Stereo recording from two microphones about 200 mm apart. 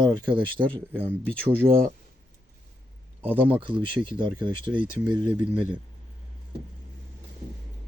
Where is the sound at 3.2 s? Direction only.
10° right (ahead or behind).